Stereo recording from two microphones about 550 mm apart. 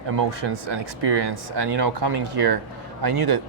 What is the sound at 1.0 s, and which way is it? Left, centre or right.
Speech, right.